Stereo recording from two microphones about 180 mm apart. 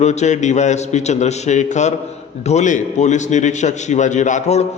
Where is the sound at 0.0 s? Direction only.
40° left (ahead or behind).